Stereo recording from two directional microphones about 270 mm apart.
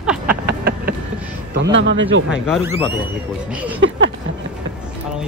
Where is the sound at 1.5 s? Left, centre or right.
Right.